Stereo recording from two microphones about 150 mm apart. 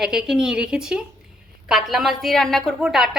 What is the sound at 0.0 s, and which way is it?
A woman's voice, 5° right (ahead or behind).